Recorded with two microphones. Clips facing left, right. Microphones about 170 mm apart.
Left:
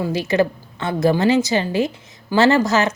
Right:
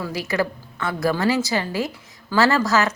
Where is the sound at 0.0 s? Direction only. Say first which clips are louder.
Left 6 dB; 25° left (ahead or behind).